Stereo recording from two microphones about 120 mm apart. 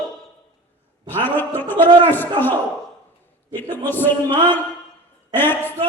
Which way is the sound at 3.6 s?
15° left (ahead or behind).